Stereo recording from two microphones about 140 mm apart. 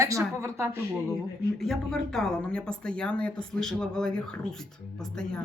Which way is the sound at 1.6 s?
Centre (ahead or behind).